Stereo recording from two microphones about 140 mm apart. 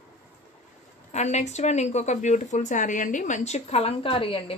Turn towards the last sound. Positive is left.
turn(degrees=40)  # may be behind; listen again after turning